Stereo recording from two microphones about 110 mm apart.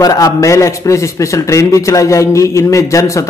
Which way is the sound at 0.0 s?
35° left (ahead or behind).